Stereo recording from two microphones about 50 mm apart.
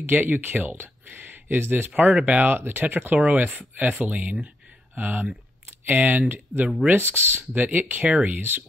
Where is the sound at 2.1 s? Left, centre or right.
Right.